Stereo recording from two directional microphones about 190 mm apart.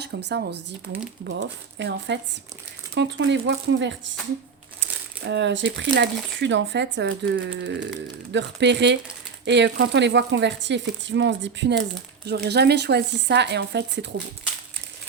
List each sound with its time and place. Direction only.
0.0 s speech: 60° right (ahead or behind)
2.9 s speech: 80° right
5.2 s speech: 70° right (ahead or behind)